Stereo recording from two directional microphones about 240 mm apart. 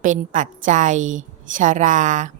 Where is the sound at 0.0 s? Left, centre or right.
Right.